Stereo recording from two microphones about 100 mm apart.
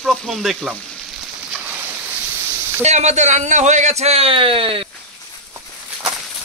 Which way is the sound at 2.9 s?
90° right.